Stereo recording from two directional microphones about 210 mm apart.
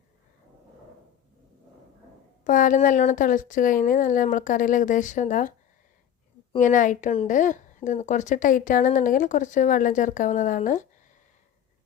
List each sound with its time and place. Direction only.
2.4 s a woman's voice: 40° left (ahead or behind)
6.6 s a woman's voice: 40° left (ahead or behind)